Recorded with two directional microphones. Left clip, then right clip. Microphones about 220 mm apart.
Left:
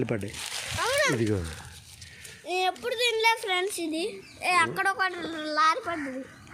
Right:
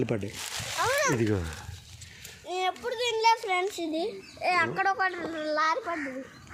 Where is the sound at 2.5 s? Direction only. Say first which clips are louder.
Left 2 dB; 30° left (ahead or behind); by 5.2 s 55° left (ahead or behind).